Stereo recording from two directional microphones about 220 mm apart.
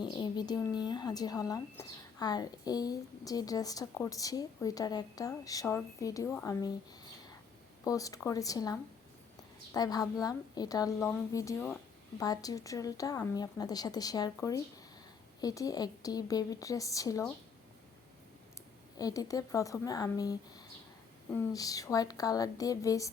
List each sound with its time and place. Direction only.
0.0 s speech: 20° left (ahead or behind)
7.9 s speech: 15° left (ahead or behind)
18.9 s speech: 15° left (ahead or behind)
21.5 s speech: 15° left (ahead or behind)